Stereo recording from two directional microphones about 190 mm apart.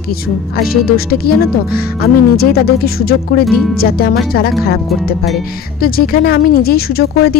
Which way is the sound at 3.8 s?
55° left (ahead or behind).